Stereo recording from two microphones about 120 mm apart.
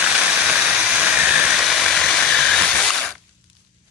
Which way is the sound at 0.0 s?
5° right (ahead or behind).